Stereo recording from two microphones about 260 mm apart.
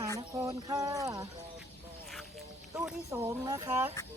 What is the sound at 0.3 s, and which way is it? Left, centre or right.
Speech, centre.